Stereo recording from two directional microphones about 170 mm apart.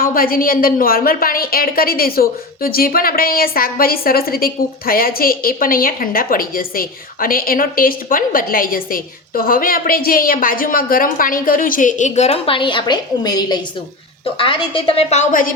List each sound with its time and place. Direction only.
0.0 s a woman's voice: 55° left (ahead or behind)